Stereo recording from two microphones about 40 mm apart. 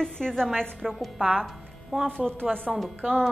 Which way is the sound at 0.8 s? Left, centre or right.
Centre.